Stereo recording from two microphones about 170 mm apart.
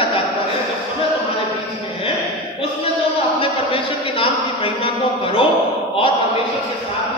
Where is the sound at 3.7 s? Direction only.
30° left (ahead or behind).